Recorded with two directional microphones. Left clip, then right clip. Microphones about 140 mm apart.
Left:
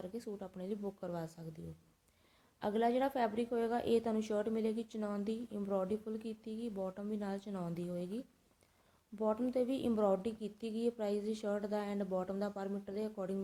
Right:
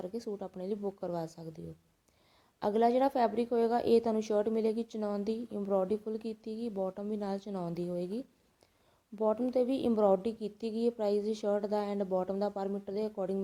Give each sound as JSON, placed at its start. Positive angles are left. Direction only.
{"t": 0.0, "sound": "a woman's voice", "side_deg": -40}